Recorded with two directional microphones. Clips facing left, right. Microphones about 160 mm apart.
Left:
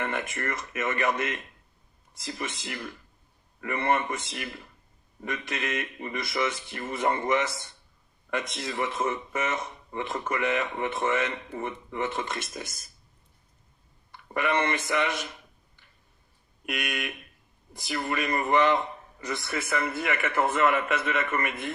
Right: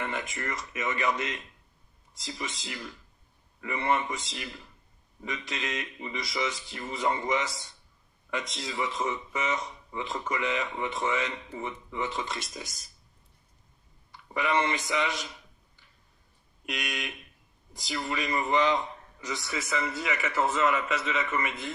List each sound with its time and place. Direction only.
0.0 s speech: 55° left (ahead or behind)
14.1 s speech: 55° left (ahead or behind)